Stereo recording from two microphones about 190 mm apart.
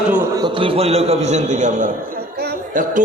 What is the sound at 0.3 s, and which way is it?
A man's voice, 25° right (ahead or behind).